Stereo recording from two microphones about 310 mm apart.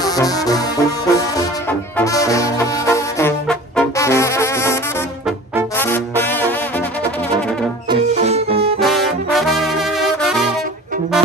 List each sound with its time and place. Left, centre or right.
0.0 s brass instrument: centre
5.8 s brass instrument: centre
7.9 s music: right
8.7 s brass instrument: centre